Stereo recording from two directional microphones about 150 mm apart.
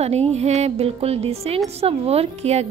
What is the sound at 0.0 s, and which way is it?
A woman's voice, 45° right (ahead or behind).